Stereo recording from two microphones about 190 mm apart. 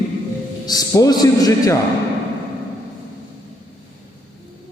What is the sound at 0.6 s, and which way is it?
A man's voice, 20° left (ahead or behind).